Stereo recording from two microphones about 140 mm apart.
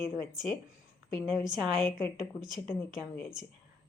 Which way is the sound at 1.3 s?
Centre (ahead or behind).